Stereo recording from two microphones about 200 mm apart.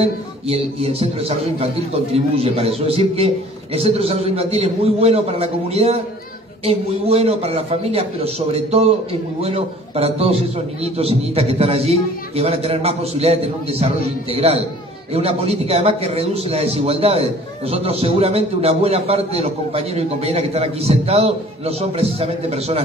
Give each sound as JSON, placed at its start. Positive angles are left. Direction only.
{"t": 0.0, "sound": "a man's voice", "side_deg": -30}